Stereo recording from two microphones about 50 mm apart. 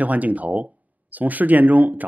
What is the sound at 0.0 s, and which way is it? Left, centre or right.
Speech, right.